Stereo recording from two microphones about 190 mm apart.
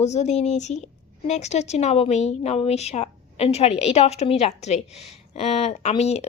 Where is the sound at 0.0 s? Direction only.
35° left (ahead or behind).